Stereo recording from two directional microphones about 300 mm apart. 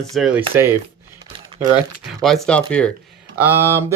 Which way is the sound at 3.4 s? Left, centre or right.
Centre.